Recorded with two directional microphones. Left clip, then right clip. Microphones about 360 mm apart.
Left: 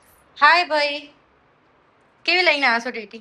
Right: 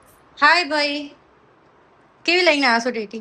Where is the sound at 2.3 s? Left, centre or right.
Centre.